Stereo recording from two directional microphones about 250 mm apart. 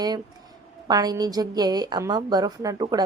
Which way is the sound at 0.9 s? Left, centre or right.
Centre.